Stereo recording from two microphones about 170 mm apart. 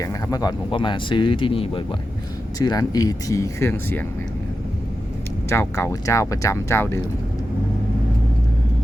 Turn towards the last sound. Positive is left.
turn(degrees=15)  # may be behind; listen again after turning